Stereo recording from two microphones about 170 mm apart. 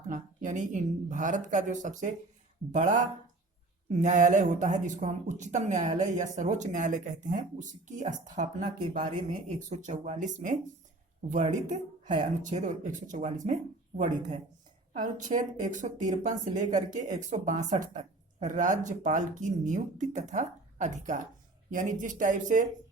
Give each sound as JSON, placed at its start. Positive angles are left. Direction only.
{"t": 0.1, "sound": "speech", "side_deg": -45}
{"t": 11.6, "sound": "a woman's voice", "side_deg": -45}